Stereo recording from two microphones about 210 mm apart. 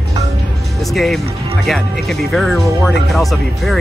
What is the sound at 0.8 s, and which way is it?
Speech, centre (ahead or behind).